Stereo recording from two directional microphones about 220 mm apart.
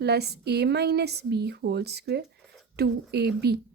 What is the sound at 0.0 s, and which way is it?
A woman's voice, 45° right (ahead or behind).